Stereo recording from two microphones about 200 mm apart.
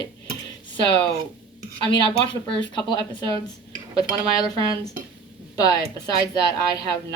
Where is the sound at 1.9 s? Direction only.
25° left (ahead or behind).